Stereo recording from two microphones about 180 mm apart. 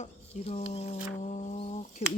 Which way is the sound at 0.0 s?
35° left (ahead or behind).